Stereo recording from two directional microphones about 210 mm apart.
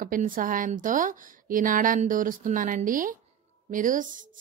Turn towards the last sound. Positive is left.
turn(degrees=-40)  # may be behind; listen again after turning